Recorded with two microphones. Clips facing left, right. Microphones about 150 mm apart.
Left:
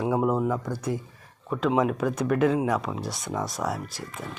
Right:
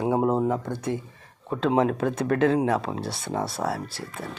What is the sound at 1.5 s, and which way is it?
Speech, 30° right (ahead or behind).